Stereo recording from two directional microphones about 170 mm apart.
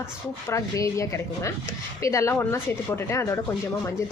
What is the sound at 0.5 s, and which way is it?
Speech, 15° left (ahead or behind).